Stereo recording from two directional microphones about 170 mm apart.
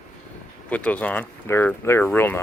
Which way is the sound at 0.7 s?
10° left (ahead or behind).